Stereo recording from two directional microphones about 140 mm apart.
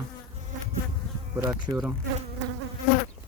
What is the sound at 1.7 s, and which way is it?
Insect, 20° right (ahead or behind).